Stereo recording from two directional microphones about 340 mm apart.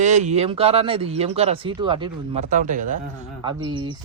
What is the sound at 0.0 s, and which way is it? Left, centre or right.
Speech, right.